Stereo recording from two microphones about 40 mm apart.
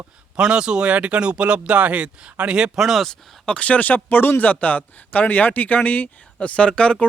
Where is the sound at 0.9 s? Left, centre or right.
Right.